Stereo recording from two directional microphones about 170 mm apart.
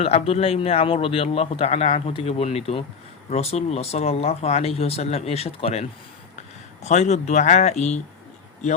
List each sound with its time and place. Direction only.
0.0 s a man's voice: 35° left (ahead or behind)
6.8 s a man's voice: 40° left (ahead or behind)